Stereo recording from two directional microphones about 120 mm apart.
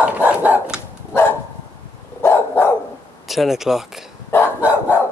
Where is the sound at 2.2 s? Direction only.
20° left (ahead or behind).